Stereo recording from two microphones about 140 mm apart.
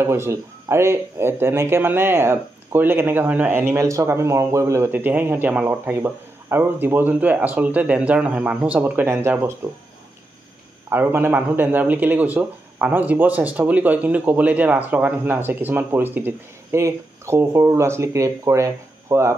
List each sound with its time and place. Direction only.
0.0 s speech: 20° right (ahead or behind)
10.9 s speech: 15° right (ahead or behind)